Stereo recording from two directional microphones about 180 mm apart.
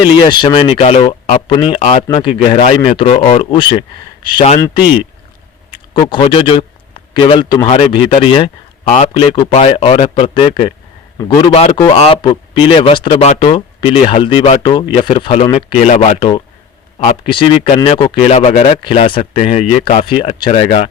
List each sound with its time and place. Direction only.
0.0 s speech: 25° left (ahead or behind)
5.9 s a man's voice: 25° left (ahead or behind)
8.8 s speech: 45° left (ahead or behind)
9.1 s speech: 30° left (ahead or behind)